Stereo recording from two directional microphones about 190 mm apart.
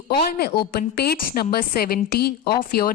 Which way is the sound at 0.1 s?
55° left (ahead or behind).